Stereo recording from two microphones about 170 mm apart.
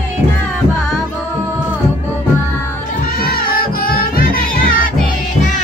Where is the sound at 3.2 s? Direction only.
60° left (ahead or behind).